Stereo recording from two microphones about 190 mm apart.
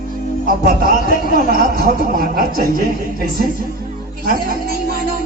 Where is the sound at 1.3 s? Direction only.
50° right (ahead or behind).